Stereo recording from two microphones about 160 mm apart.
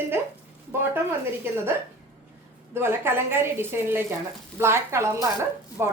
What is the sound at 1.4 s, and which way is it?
A woman's voice, 15° right (ahead or behind).